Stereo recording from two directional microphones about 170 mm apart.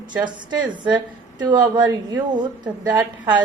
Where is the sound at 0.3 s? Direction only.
25° right (ahead or behind).